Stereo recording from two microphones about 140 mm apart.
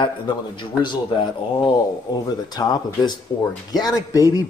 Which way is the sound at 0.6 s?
35° left (ahead or behind).